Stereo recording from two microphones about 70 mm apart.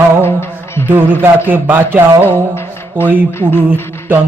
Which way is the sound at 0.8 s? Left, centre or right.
Right.